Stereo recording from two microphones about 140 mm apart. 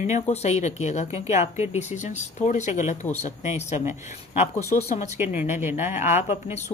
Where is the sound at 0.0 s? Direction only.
50° left (ahead or behind).